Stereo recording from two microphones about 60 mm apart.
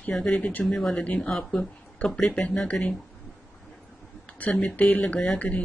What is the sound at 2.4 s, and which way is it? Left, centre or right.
Speech, left.